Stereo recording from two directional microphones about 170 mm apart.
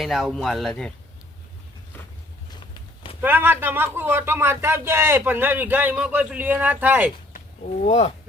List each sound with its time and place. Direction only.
0.0 s speech: centre (ahead or behind)
2.6 s a sound: 30° left (ahead or behind)
3.2 s speech: 10° right (ahead or behind)
7.9 s speech: 40° left (ahead or behind)